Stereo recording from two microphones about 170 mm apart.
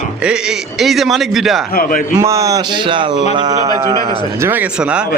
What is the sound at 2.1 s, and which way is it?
Mantra, 20° right (ahead or behind).